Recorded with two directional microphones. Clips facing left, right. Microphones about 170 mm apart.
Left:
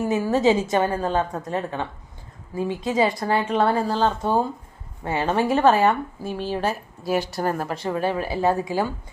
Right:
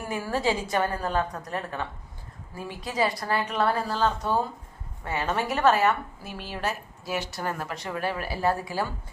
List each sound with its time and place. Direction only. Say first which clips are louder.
0.0 s speech: left 8 dB; 20° left (ahead or behind)